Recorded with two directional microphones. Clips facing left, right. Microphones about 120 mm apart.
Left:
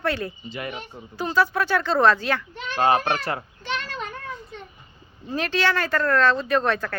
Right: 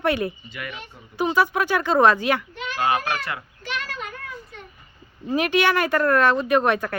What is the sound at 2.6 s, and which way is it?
Speech, 35° left (ahead or behind).